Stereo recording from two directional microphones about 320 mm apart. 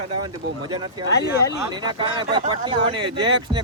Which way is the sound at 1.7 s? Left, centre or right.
Centre.